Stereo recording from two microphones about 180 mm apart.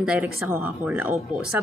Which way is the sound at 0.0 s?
5° right (ahead or behind).